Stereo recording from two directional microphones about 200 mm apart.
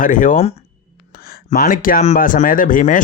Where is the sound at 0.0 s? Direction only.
40° left (ahead or behind).